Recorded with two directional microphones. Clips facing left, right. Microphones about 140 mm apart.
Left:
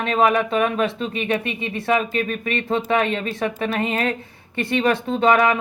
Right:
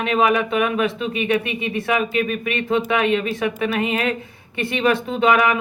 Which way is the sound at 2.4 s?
35° left (ahead or behind).